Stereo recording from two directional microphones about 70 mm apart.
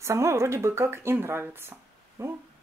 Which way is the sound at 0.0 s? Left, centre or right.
Right.